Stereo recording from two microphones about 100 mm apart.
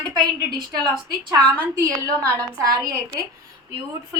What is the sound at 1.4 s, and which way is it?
A woman's voice, 35° right (ahead or behind).